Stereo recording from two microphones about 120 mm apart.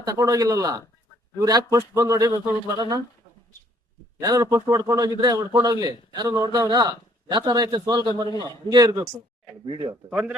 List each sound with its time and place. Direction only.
0.0 s a man's voice: 30° right (ahead or behind)
4.2 s a man's voice: 25° right (ahead or behind)
9.9 s a man's voice: 10° right (ahead or behind)